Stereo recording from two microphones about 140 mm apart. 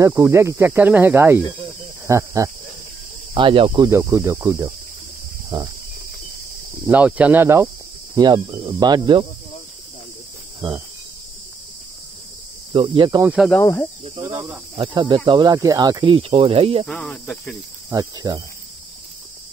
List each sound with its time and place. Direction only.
0.0 s speech: 20° right (ahead or behind)
3.3 s speech: 40° right (ahead or behind)
3.9 s speech: 15° right (ahead or behind)
6.9 s speech: 10° right (ahead or behind)
8.2 s speech: 30° right (ahead or behind)
12.7 s speech: 35° right (ahead or behind)
13.2 s speech: 10° right (ahead or behind)
13.6 s speech: 15° left (ahead or behind)
14.2 s speech: 20° right (ahead or behind)
14.8 s speech: 35° right (ahead or behind)
16.8 s speech: 5° left (ahead or behind)
17.8 s speech: 25° right (ahead or behind)